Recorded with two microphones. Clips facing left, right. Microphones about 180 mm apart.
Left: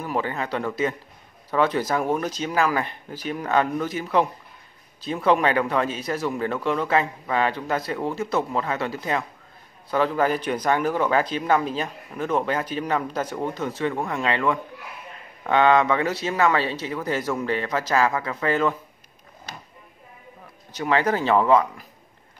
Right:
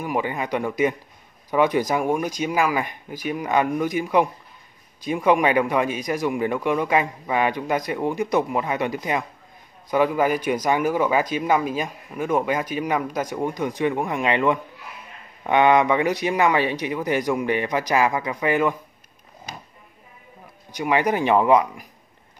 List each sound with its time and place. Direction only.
0.0 s speech: 15° right (ahead or behind)
20.7 s speech: 15° right (ahead or behind)